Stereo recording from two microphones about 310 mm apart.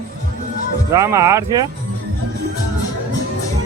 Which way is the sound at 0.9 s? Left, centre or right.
Centre.